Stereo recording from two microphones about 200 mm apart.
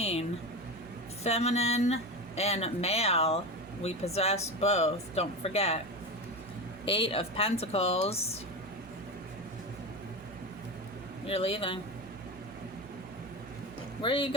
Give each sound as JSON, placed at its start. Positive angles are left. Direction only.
{"t": 0.0, "sound": "a sound", "side_deg": 30}
{"t": 1.2, "sound": "speech", "side_deg": 30}
{"t": 6.8, "sound": "a woman's voice", "side_deg": 25}
{"t": 11.3, "sound": "a woman's voice", "side_deg": 30}
{"t": 14.0, "sound": "a woman's voice", "side_deg": 25}